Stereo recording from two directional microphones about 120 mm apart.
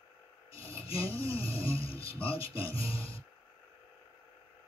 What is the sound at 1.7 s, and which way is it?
Speech, 50° left (ahead or behind).